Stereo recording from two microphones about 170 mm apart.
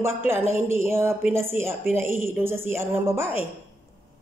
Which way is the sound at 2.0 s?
40° left (ahead or behind).